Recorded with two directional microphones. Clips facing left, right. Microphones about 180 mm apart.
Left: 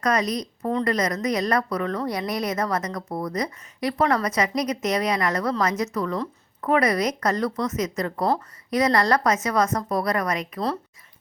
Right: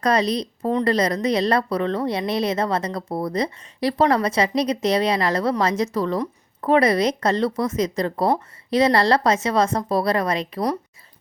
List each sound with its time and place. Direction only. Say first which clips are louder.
0.0 s a woman's voice: right 3 dB; 30° right (ahead or behind)